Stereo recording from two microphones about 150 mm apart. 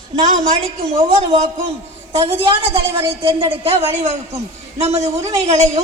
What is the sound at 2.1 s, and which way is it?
Speech, 40° right (ahead or behind).